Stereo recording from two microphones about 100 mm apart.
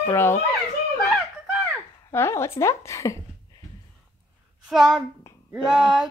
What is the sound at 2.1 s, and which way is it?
A woman's voice, 25° left (ahead or behind).